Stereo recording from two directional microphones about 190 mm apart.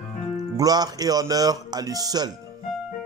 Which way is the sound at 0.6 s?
20° right (ahead or behind).